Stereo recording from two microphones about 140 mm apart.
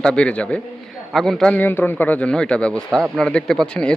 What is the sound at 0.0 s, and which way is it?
A man's voice, 5° left (ahead or behind).